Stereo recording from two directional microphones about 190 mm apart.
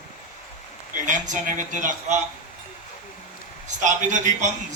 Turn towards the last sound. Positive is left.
turn(degrees=-40)  # may be behind; listen again after turning